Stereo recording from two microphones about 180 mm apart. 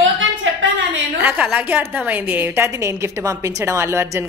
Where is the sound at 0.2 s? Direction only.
90° right.